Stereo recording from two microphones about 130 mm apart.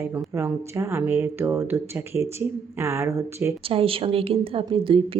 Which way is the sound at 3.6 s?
45° right (ahead or behind).